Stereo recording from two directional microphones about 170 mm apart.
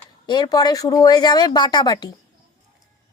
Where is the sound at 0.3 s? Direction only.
25° left (ahead or behind).